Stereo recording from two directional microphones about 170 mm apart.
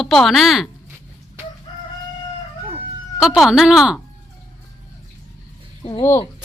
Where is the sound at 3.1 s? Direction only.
Centre (ahead or behind).